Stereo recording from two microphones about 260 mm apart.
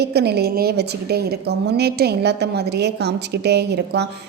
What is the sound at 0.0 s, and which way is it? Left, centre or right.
A woman's voice, right.